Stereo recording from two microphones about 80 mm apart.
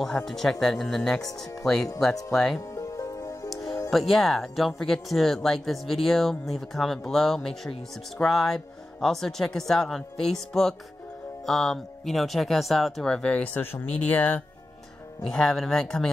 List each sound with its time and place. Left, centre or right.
0.0 s speech: centre
2.7 s music: left
3.9 s speech: centre; by 14.4 s left
15.2 s speech: centre